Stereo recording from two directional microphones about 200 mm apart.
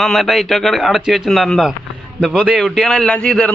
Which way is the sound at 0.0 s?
Centre (ahead or behind).